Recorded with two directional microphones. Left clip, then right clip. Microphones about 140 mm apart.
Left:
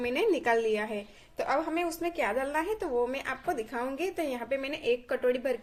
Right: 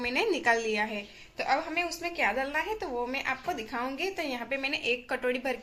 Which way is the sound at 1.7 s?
55° left (ahead or behind).